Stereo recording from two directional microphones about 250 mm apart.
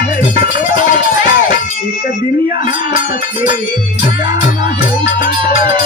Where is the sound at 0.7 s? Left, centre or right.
Left.